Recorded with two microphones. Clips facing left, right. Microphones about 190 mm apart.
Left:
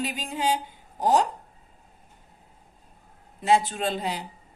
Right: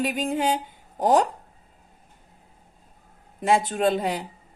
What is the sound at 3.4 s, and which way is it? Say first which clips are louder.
Speech: right 1 dB; 50° right (ahead or behind).